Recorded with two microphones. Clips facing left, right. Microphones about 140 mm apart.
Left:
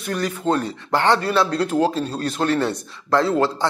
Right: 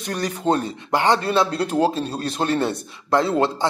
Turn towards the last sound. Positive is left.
turn(degrees=-20)  # may be behind; listen again after turning